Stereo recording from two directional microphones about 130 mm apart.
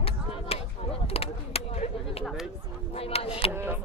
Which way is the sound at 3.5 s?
15° right (ahead or behind).